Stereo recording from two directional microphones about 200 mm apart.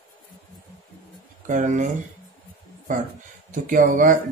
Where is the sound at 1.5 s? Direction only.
40° right (ahead or behind).